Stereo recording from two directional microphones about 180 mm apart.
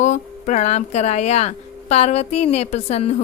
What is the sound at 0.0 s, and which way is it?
Speech, 40° left (ahead or behind).